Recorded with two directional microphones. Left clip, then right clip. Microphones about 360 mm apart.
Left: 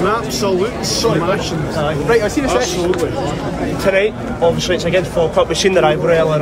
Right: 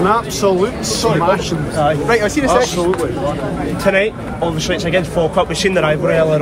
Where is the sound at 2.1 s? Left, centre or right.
Right.